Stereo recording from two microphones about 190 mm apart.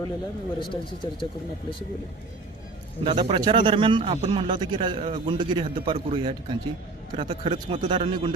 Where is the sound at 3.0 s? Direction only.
30° right (ahead or behind).